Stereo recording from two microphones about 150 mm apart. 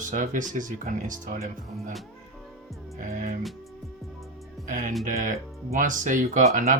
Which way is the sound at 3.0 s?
60° right (ahead or behind).